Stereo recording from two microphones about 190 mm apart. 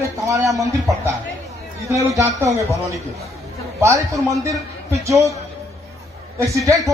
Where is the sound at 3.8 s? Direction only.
15° right (ahead or behind).